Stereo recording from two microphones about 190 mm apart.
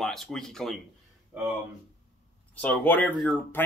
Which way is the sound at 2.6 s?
10° left (ahead or behind).